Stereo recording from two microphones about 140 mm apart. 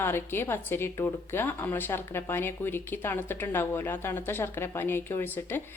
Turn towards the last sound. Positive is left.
turn(degrees=15)  # may be behind; listen again after turning